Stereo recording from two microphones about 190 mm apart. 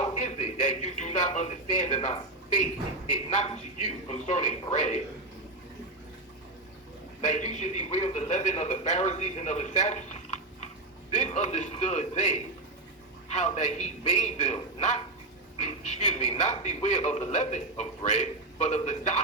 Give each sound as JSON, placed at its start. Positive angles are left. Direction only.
{"t": 0.0, "sound": "a man's voice", "side_deg": 35}
{"t": 3.2, "sound": "a man's voice", "side_deg": 35}
{"t": 7.3, "sound": "a man's voice", "side_deg": 40}